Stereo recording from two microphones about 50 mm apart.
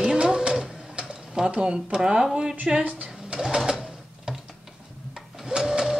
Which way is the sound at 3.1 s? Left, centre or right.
Centre.